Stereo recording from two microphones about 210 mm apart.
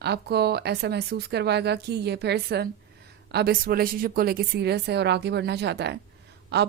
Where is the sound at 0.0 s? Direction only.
50° right (ahead or behind).